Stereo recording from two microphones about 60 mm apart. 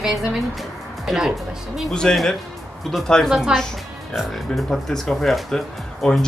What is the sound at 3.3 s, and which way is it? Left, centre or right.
Speech, centre.